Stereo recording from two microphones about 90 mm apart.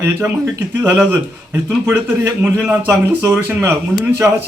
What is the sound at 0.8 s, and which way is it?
A man's voice, 20° right (ahead or behind).